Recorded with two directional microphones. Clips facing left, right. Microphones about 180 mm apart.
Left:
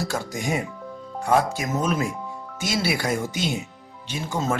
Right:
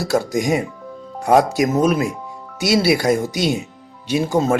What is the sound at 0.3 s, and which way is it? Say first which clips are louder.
Speech: right 6 dB; 15° right (ahead or behind).